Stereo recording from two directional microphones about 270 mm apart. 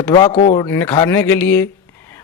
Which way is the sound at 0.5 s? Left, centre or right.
Centre.